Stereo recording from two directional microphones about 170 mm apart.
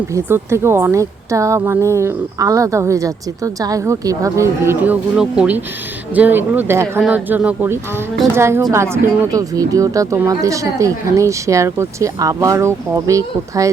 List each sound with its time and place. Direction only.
0.1 s a woman's voice: 15° right (ahead or behind)